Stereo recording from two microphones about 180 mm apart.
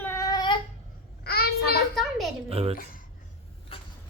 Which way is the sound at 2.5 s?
35° right (ahead or behind).